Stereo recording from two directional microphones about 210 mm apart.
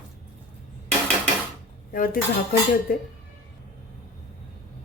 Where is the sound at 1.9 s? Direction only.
40° left (ahead or behind).